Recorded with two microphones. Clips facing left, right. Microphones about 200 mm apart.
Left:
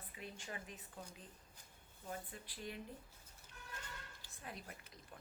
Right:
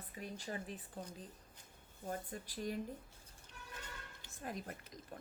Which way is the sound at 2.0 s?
45° right (ahead or behind).